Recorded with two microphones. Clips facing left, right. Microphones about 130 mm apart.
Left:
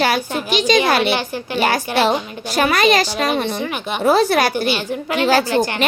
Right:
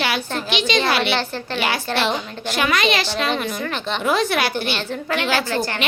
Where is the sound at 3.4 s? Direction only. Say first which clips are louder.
Left 3 dB; 30° left (ahead or behind).